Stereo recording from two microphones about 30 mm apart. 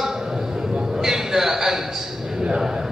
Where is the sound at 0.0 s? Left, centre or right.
Centre.